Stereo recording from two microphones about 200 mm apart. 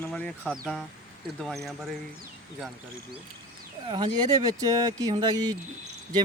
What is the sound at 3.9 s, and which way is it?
Speech, 20° right (ahead or behind).